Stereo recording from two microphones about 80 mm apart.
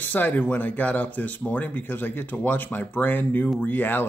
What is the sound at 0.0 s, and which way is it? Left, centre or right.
Speech, left.